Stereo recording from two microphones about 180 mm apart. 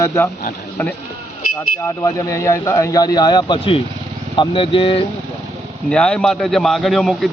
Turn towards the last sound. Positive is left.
turn(degrees=0)  # may be behind; listen again after turning